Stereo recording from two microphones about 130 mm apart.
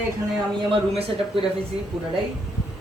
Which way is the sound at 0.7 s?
50° right (ahead or behind).